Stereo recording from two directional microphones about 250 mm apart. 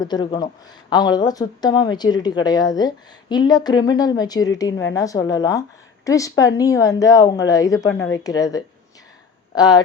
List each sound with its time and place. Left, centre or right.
0.0 s speech: centre